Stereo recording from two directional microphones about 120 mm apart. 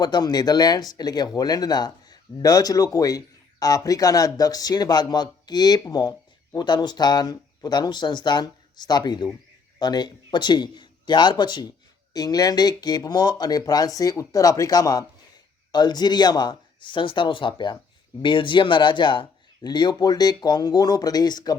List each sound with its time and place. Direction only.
0.0 s speech: 35° left (ahead or behind)